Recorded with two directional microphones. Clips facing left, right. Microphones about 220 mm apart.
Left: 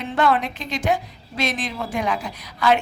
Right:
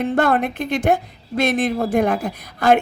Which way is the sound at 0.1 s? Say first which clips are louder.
Right 3 dB; 50° right (ahead or behind).